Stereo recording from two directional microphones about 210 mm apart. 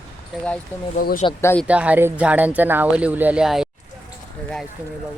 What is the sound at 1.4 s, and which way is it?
Speech, 10° left (ahead or behind).